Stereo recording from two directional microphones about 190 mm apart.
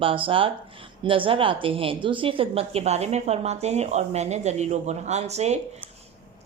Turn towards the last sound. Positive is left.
turn(degrees=-35)  # may be behind; listen again after turning